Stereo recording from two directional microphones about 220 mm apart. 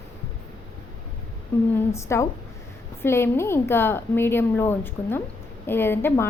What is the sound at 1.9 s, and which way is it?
A woman's voice, 15° left (ahead or behind).